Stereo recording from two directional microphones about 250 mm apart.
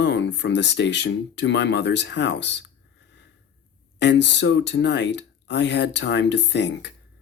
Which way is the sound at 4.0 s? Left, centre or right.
Left.